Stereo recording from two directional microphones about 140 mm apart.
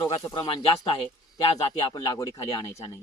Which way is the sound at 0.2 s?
30° left (ahead or behind).